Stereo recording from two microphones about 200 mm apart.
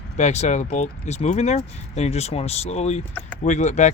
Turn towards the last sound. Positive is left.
turn(degrees=35)  # may be behind; listen again after turning